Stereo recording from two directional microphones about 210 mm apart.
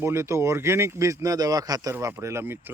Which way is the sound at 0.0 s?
15° right (ahead or behind).